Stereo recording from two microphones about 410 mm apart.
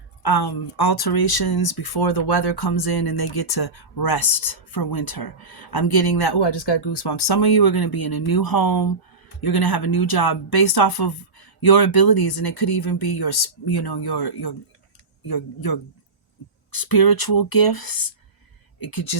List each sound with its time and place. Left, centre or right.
0.2 s speech: left